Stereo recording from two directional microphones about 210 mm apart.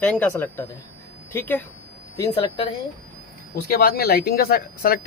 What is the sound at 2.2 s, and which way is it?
Speech, 25° left (ahead or behind).